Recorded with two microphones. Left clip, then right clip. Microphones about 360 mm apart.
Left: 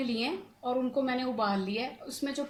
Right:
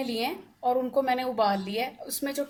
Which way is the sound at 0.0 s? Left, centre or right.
Right.